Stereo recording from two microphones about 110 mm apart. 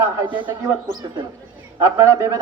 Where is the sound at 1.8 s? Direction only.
30° right (ahead or behind).